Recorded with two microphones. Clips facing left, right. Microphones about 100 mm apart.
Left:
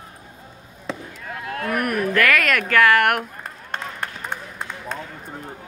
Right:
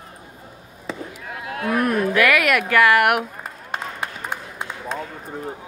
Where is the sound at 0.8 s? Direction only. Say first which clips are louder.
Even; 10° right (ahead or behind).